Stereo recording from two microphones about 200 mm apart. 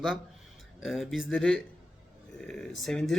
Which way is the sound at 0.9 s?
Centre (ahead or behind).